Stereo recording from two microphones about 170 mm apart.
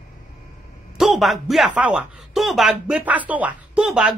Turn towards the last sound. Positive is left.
turn(degrees=-5)  # may be behind; listen again after turning